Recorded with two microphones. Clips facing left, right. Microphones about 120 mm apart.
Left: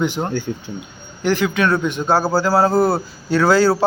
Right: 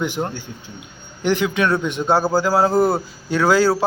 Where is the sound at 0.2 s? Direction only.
15° left (ahead or behind).